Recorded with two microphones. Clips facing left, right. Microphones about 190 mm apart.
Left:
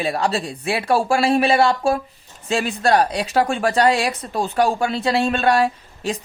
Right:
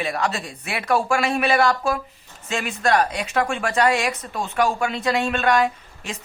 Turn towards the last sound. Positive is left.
turn(degrees=35)  # may be behind; listen again after turning